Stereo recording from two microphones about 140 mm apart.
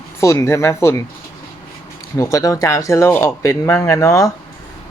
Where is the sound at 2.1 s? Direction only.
25° left (ahead or behind).